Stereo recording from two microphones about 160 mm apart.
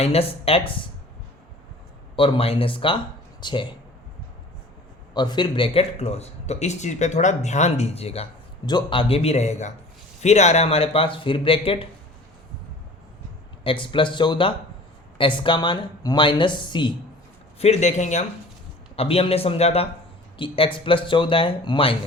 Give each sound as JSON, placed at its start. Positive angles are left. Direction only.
{"t": 0.0, "sound": "speech", "side_deg": 40}
{"t": 2.1, "sound": "speech", "side_deg": 35}
{"t": 5.1, "sound": "speech", "side_deg": 25}
{"t": 13.7, "sound": "speech", "side_deg": 30}
{"t": 17.6, "sound": "speech", "side_deg": 45}
{"t": 18.9, "sound": "speech", "side_deg": 35}